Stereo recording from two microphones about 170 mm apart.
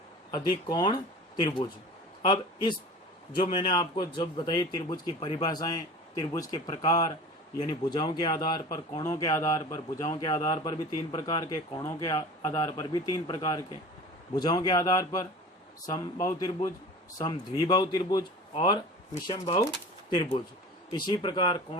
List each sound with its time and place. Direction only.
0.3 s speech: 25° left (ahead or behind)
17.7 s speech: 25° left (ahead or behind)
20.9 s speech: 25° left (ahead or behind)